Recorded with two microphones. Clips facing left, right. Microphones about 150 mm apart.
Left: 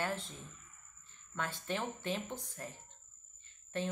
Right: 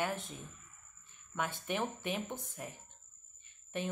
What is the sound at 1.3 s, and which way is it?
A woman's voice, 15° right (ahead or behind).